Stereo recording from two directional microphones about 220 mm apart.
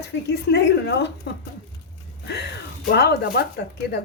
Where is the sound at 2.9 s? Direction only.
45° left (ahead or behind).